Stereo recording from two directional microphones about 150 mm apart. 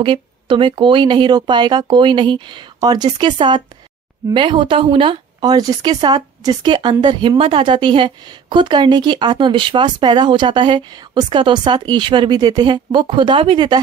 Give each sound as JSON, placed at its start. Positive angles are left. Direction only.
{"t": 0.0, "sound": "speech", "side_deg": -35}